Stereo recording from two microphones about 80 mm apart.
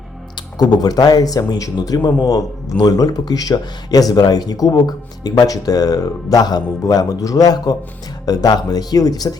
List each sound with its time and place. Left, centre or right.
0.6 s speech: left
2.0 s speech: left